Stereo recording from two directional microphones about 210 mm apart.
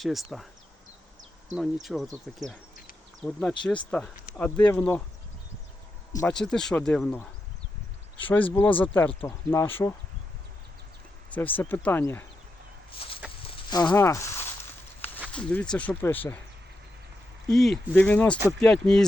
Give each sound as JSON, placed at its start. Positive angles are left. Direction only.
{"t": 0.0, "sound": "speech", "side_deg": 0}
{"t": 1.5, "sound": "speech", "side_deg": 0}
{"t": 6.2, "sound": "speech", "side_deg": 5}
{"t": 11.3, "sound": "speech", "side_deg": 10}
{"t": 13.0, "sound": "a sound", "side_deg": 25}
{"t": 15.3, "sound": "speech", "side_deg": 5}
{"t": 17.5, "sound": "speech", "side_deg": 0}